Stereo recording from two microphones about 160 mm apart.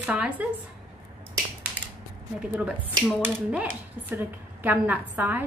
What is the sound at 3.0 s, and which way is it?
Speech, 10° right (ahead or behind).